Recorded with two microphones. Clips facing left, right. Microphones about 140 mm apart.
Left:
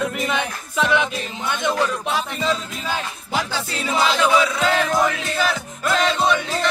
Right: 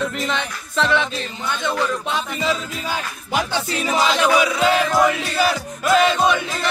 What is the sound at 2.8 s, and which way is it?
Music, 15° right (ahead or behind).